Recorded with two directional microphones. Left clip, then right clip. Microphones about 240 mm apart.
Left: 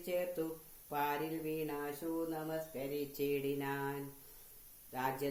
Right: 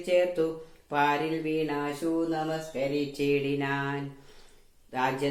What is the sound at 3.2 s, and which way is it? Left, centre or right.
Speech, left.